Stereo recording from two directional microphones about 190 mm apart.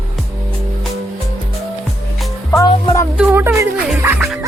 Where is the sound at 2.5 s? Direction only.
15° left (ahead or behind).